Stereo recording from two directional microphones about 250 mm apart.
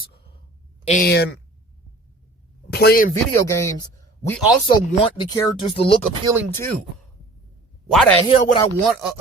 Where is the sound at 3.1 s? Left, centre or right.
Centre.